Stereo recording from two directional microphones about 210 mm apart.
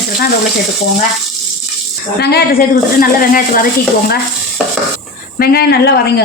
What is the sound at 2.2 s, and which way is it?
A woman's voice, 50° left (ahead or behind).